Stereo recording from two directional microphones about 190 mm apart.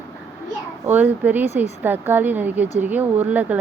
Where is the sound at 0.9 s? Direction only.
10° right (ahead or behind).